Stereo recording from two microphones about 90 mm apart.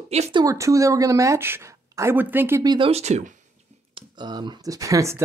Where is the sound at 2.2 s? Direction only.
20° right (ahead or behind).